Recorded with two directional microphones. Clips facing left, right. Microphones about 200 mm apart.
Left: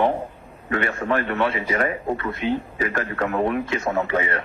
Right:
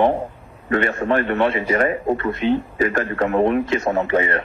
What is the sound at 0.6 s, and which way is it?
Speech, 35° right (ahead or behind).